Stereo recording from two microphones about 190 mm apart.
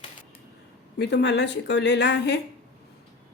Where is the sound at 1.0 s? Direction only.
65° left (ahead or behind).